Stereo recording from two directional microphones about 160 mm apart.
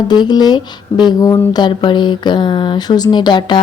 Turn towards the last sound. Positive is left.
turn(degrees=30)  # may be behind; listen again after turning